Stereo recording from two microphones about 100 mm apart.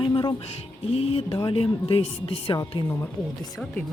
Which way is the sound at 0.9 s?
85° left.